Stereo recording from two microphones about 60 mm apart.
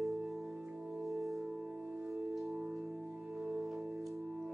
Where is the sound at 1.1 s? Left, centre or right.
Centre.